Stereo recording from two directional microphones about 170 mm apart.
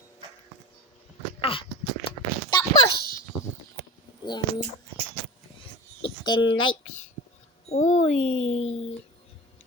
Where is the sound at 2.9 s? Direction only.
60° left (ahead or behind).